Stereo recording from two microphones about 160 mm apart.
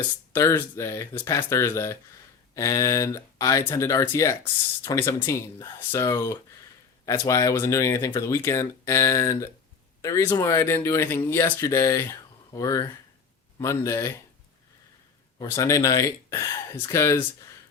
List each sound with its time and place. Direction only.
0.3 s speech: 15° left (ahead or behind)
1.1 s speech: 25° left (ahead or behind)
15.4 s speech: 20° left (ahead or behind)